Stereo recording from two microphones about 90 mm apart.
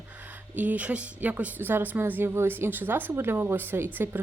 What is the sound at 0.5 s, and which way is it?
A woman's voice, 20° right (ahead or behind).